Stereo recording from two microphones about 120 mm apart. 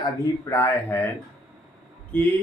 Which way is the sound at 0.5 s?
20° left (ahead or behind).